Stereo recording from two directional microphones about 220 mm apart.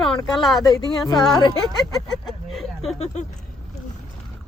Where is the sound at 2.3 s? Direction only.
Centre (ahead or behind).